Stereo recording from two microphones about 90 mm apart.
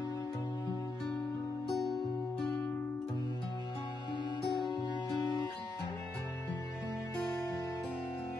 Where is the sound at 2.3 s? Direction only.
10° left (ahead or behind).